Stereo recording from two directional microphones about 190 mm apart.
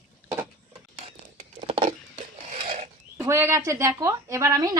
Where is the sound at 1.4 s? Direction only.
25° right (ahead or behind).